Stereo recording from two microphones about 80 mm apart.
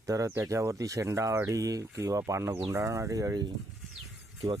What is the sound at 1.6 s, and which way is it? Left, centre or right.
Speech, right.